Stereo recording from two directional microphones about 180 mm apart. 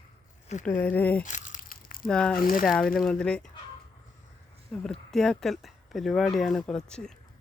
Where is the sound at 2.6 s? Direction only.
5° left (ahead or behind).